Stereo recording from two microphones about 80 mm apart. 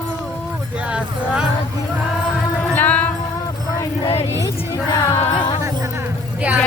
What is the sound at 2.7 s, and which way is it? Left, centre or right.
Music, left.